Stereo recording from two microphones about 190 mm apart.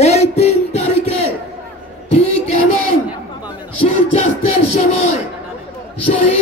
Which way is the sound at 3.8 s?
35° left (ahead or behind).